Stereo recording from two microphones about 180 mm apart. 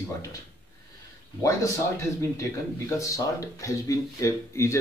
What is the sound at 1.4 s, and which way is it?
Speech, 15° left (ahead or behind).